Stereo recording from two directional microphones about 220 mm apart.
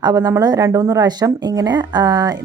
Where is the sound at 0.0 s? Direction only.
15° right (ahead or behind).